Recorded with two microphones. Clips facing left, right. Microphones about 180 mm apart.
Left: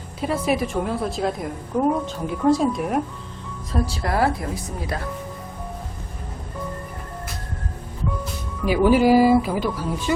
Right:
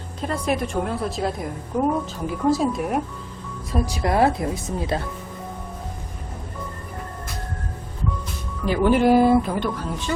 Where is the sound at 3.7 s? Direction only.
15° right (ahead or behind).